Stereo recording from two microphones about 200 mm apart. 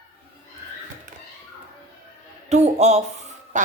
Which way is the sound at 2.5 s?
35° right (ahead or behind).